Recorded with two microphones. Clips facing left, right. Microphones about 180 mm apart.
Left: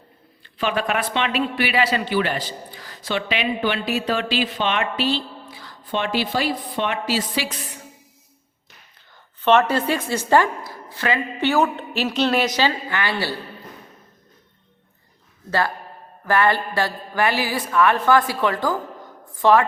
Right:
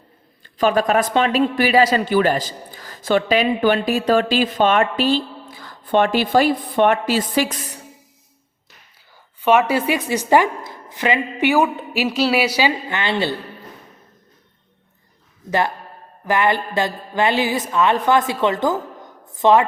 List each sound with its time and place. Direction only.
0.4 s speech: 40° right (ahead or behind)
9.4 s a woman's voice: 10° right (ahead or behind)
12.9 s a woman's voice: 20° right (ahead or behind)
15.4 s a woman's voice: 20° right (ahead or behind)